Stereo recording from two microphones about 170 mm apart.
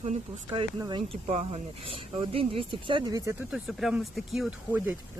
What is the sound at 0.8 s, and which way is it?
Speech, 25° right (ahead or behind).